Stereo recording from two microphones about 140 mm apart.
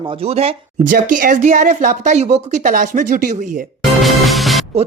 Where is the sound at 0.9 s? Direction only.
85° right; by 3.7 s 65° right (ahead or behind).